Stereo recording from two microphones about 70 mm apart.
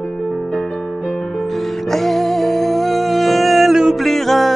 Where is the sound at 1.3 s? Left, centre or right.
Centre.